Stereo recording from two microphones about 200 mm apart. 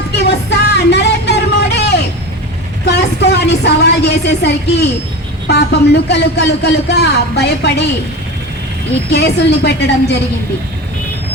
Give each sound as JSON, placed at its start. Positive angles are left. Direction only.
{"t": 0.1, "sound": "music", "side_deg": 55}
{"t": 0.9, "sound": "a sound", "side_deg": 60}
{"t": 2.8, "sound": "a woman's voice", "side_deg": 55}
{"t": 9.0, "sound": "speech", "side_deg": 55}